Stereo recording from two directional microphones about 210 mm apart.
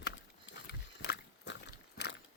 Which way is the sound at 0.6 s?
55° left (ahead or behind).